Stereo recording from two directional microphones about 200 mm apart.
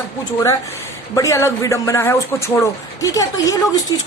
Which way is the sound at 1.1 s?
15° left (ahead or behind).